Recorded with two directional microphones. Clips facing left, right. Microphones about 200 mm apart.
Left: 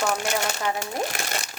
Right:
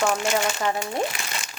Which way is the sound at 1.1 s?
45° left (ahead or behind).